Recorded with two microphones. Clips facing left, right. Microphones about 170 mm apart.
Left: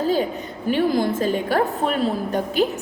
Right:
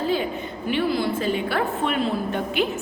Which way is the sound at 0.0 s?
40° left (ahead or behind).